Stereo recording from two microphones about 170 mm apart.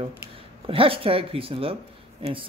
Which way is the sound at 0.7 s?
35° right (ahead or behind).